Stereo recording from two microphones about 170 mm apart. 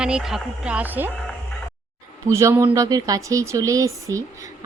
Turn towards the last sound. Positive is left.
turn(degrees=-20)  # may be behind; listen again after turning